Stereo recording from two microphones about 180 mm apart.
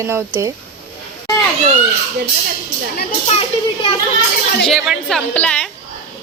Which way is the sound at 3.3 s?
30° left (ahead or behind).